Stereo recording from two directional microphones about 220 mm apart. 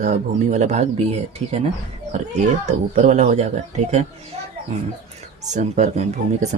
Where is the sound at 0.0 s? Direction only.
35° right (ahead or behind).